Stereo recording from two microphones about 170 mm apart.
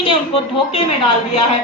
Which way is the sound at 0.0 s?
30° left (ahead or behind).